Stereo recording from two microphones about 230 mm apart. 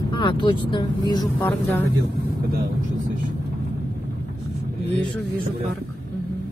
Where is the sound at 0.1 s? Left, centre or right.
Left.